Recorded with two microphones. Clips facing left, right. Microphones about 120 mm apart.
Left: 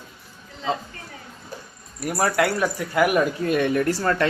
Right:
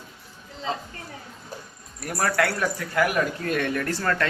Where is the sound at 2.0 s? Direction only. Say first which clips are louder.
Left 3 dB; 10° left (ahead or behind).